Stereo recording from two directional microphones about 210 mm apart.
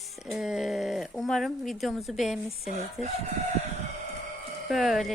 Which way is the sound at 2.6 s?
30° left (ahead or behind).